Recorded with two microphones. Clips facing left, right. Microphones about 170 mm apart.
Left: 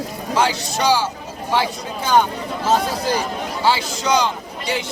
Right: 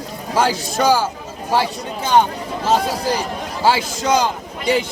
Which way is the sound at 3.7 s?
50° right (ahead or behind).